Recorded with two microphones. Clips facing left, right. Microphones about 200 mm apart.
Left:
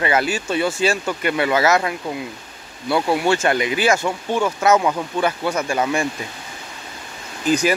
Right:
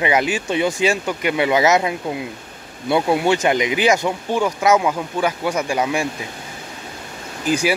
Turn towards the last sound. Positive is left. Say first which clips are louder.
# left 1 dB
turn(degrees=-10)  # may be behind; listen again after turning